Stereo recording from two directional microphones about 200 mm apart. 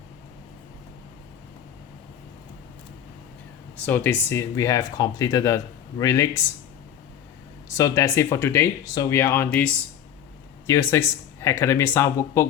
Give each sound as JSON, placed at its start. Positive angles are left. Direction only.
{"t": 3.8, "sound": "speech", "side_deg": 10}
{"t": 7.7, "sound": "speech", "side_deg": 15}